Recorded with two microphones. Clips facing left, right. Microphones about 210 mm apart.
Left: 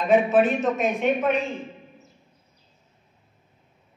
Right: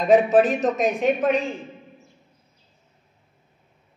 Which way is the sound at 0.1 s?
40° right (ahead or behind).